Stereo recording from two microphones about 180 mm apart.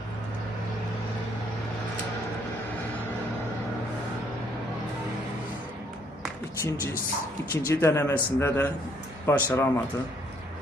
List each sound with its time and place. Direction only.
6.6 s a man's voice: 15° left (ahead or behind)